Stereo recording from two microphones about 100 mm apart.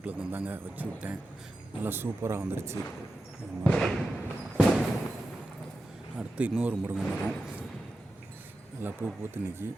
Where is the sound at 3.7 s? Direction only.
5° left (ahead or behind).